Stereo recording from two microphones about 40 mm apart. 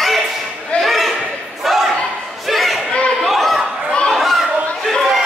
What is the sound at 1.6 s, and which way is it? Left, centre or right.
Thump, centre.